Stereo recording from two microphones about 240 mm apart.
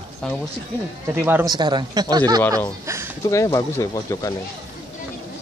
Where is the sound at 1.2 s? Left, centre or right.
Centre.